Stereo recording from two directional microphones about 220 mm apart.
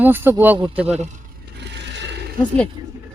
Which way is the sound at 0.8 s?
30° right (ahead or behind).